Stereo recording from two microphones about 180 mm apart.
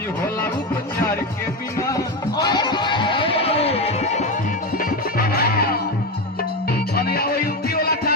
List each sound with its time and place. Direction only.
2.4 s music: 25° left (ahead or behind)
4.8 s music: 55° left (ahead or behind)
6.9 s music: 60° left (ahead or behind)